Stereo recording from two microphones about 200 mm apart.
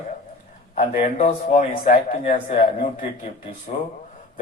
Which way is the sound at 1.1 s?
30° left (ahead or behind).